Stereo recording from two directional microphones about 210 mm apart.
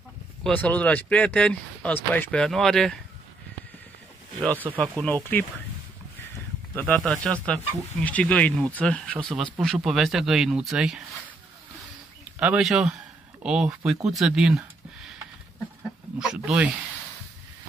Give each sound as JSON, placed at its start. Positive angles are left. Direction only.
{"t": 0.4, "sound": "speech", "side_deg": 5}
{"t": 4.4, "sound": "speech", "side_deg": 5}
{"t": 6.7, "sound": "speech", "side_deg": 10}
{"t": 12.4, "sound": "speech", "side_deg": -5}
{"t": 16.2, "sound": "speech", "side_deg": 0}